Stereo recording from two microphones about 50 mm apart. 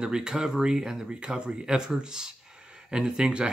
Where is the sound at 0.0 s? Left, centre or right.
Centre.